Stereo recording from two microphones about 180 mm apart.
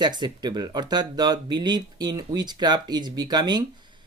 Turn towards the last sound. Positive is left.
turn(degrees=-25)  # may be behind; listen again after turning